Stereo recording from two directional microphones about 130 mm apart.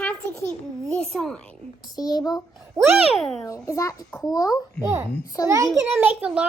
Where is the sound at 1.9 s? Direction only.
30° left (ahead or behind).